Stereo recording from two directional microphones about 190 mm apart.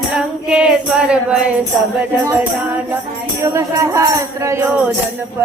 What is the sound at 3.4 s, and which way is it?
Music, 15° right (ahead or behind).